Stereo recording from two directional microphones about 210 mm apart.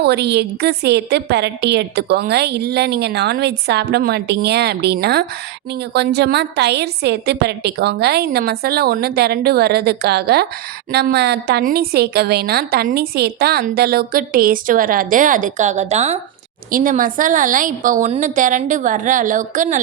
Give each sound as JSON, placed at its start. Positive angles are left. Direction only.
{"t": 0.0, "sound": "a woman's voice", "side_deg": -50}